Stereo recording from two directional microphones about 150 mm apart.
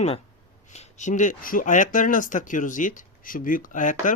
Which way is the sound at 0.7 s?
50° left (ahead or behind).